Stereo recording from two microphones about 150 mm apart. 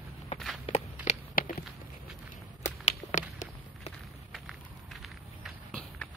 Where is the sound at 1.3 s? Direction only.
75° left (ahead or behind).